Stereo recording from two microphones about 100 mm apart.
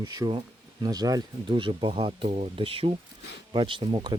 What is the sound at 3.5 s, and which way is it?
Speech, 55° right (ahead or behind).